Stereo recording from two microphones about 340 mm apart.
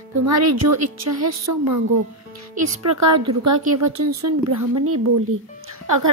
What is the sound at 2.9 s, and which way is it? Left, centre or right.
A woman's voice, right.